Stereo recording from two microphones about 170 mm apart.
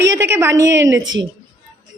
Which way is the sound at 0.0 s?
15° right (ahead or behind).